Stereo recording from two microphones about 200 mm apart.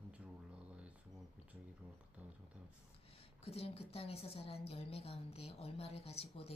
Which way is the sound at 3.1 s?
30° left (ahead or behind).